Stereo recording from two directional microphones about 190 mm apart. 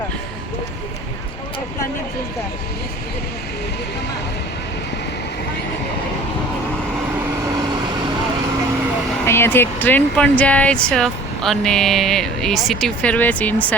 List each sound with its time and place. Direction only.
9.2 s speech: 15° left (ahead or behind)